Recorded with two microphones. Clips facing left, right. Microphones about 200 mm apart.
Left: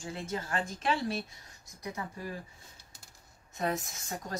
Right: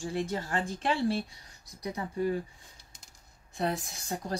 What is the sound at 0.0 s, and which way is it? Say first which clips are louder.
A woman's voice: right 5 dB; 35° right (ahead or behind).